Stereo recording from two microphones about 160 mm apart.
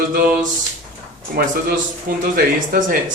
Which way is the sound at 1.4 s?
70° right (ahead or behind).